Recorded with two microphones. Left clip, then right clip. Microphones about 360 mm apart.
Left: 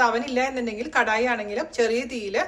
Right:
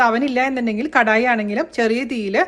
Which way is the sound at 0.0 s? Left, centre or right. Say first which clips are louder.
Right 5 dB; right.